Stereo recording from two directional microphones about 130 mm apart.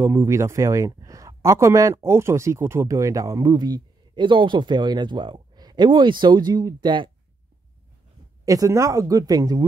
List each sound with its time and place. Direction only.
0.0 s speech: 20° right (ahead or behind); by 7.1 s 35° right (ahead or behind)
8.5 s speech: 25° right (ahead or behind)